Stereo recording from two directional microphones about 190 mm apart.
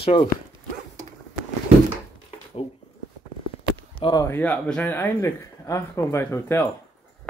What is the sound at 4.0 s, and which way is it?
Speech, 20° left (ahead or behind).